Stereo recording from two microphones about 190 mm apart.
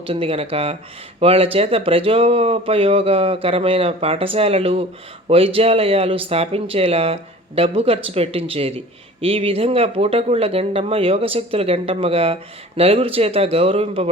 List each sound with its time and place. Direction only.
0.0 s speech: 30° right (ahead or behind)